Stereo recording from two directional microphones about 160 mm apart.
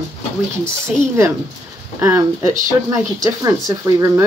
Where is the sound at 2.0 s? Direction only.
20° right (ahead or behind).